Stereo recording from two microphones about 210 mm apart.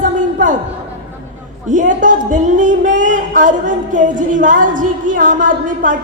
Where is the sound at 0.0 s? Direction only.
40° right (ahead or behind).